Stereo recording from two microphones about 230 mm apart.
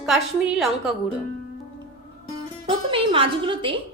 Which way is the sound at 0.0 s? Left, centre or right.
Centre.